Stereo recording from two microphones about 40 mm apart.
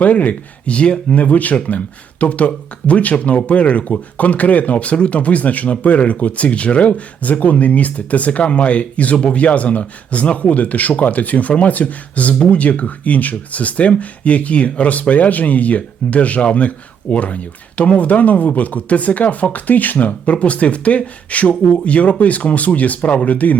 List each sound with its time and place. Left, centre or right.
0.0 s speech: left